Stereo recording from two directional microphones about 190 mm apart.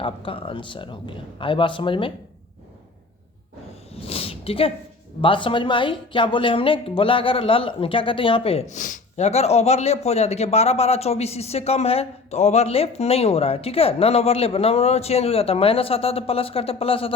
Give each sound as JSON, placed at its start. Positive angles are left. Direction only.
{"t": 0.0, "sound": "speech", "side_deg": 30}
{"t": 3.9, "sound": "a sound", "side_deg": 30}
{"t": 5.2, "sound": "speech", "side_deg": 25}